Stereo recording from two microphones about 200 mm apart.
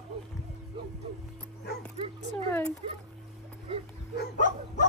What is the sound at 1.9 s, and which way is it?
Dog, 30° right (ahead or behind).